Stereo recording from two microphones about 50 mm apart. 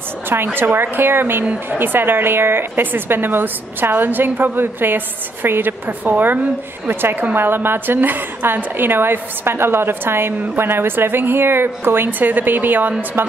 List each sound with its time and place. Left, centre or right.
0.6 s a woman's voice: right